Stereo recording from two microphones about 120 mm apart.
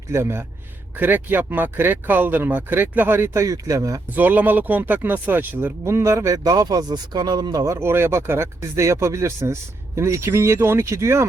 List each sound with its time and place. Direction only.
0.1 s speech: 20° right (ahead or behind)
4.1 s speech: 15° right (ahead or behind)